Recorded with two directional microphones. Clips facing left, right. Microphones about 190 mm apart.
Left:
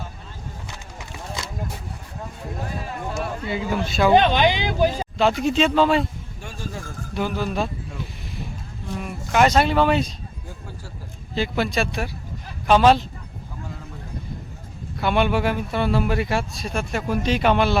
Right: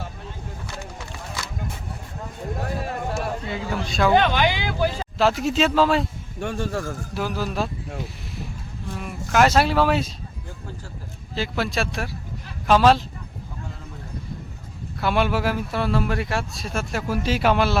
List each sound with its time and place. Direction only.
3.2 s speech: centre (ahead or behind)
4.1 s speech: 20° left (ahead or behind)
5.1 s speech: centre (ahead or behind)
6.4 s speech: 65° right (ahead or behind)
7.1 s speech: centre (ahead or behind)
9.0 s speech: centre (ahead or behind)
11.3 s speech: centre (ahead or behind)
15.0 s speech: centre (ahead or behind)